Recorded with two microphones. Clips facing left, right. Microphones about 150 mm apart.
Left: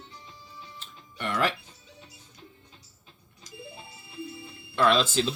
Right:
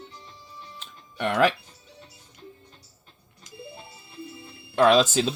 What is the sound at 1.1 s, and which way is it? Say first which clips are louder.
Speech: right 5 dB; 75° right (ahead or behind).